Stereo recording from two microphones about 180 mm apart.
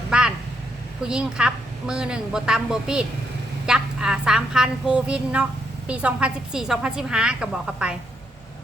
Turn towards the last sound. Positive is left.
turn(degrees=-5)  # may be behind; listen again after turning